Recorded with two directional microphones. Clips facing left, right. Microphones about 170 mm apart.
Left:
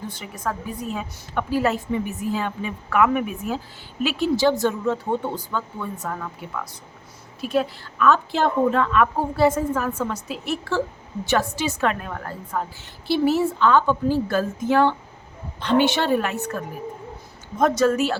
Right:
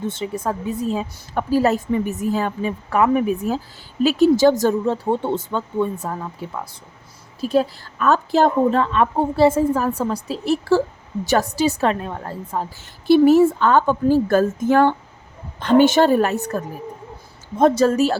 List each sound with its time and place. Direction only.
0.0 s a woman's voice: 25° right (ahead or behind); by 4.9 s 40° right (ahead or behind)
5.2 s a woman's voice: 25° right (ahead or behind)
13.1 s a woman's voice: 50° right (ahead or behind)